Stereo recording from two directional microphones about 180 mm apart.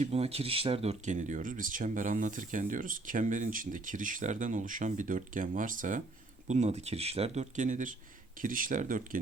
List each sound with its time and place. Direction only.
0.0 s speech: 35° right (ahead or behind)